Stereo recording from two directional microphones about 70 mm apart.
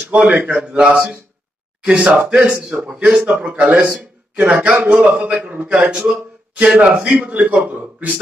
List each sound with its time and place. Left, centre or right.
0.1 s a man's voice: right